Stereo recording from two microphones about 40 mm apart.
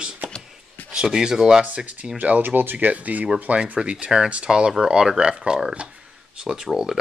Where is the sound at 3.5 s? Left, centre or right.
Right; by 6.8 s centre.